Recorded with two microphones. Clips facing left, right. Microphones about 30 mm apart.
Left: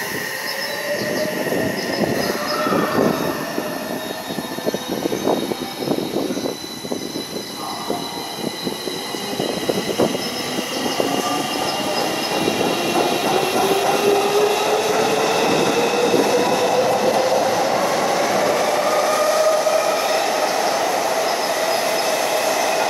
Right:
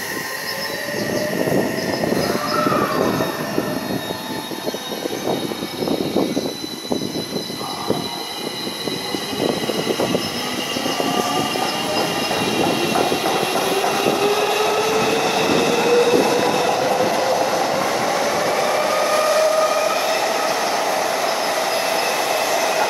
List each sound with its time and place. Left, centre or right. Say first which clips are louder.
10.9 s train: even; centre
19.1 s train: even; right
19.7 s train: left 1 dB; centre